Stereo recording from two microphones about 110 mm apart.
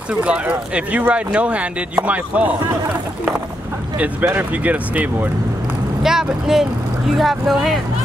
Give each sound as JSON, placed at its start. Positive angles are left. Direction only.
{"t": 0.2, "sound": "speech", "side_deg": -10}
{"t": 6.0, "sound": "speech", "side_deg": -5}